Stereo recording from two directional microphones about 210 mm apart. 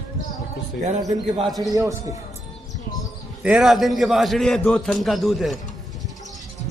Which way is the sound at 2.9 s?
5° right (ahead or behind).